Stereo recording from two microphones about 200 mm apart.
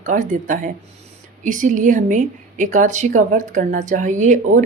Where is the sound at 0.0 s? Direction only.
40° right (ahead or behind).